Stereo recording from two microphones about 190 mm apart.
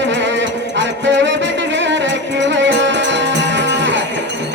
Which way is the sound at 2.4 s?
70° right (ahead or behind).